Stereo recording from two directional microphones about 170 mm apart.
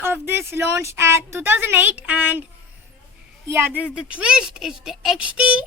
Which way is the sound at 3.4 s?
15° right (ahead or behind).